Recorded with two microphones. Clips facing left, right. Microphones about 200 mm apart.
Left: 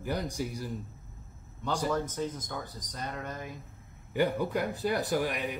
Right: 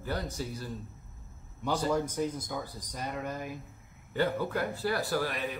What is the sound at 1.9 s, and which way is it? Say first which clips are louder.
Speech: right 2 dB; 10° right (ahead or behind).